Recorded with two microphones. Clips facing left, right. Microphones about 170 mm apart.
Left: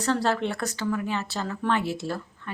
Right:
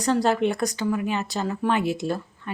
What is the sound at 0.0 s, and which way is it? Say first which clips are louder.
Speech: right 4 dB; 15° right (ahead or behind).